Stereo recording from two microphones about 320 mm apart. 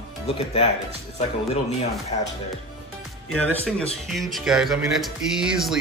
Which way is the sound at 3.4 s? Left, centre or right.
Centre.